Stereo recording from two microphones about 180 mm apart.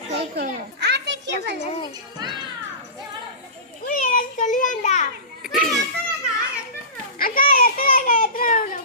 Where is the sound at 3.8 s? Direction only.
55° left (ahead or behind).